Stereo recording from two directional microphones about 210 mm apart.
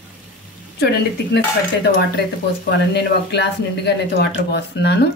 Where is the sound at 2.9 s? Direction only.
55° left (ahead or behind).